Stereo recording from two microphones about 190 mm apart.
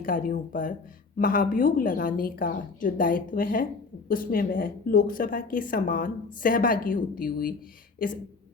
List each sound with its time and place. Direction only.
0.0 s speech: 45° left (ahead or behind)